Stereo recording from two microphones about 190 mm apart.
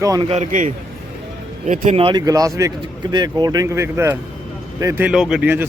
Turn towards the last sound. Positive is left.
turn(degrees=-10)  # may be behind; listen again after turning